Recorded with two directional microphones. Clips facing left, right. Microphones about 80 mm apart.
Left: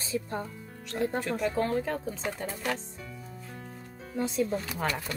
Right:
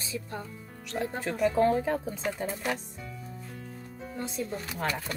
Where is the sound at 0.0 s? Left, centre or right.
Left.